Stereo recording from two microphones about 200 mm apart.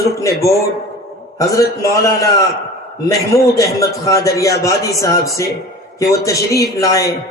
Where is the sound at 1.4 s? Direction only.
15° left (ahead or behind).